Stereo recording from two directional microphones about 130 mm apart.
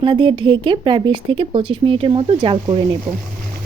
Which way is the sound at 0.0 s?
40° right (ahead or behind).